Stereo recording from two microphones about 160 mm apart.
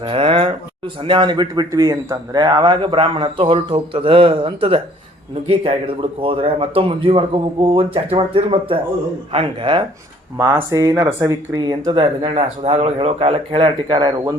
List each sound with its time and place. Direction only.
0.0 s a man's voice: 35° right (ahead or behind)
10.3 s speech: 15° right (ahead or behind)